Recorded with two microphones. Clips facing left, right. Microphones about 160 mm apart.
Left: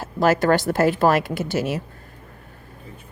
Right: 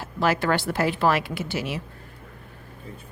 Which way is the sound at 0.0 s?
40° left (ahead or behind).